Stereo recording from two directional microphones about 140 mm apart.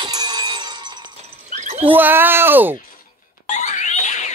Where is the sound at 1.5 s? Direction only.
55° right (ahead or behind).